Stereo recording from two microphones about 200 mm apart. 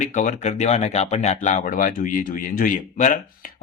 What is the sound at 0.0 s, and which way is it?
Speech, 40° left (ahead or behind).